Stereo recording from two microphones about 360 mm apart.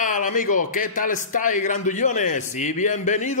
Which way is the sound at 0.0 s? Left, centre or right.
Left.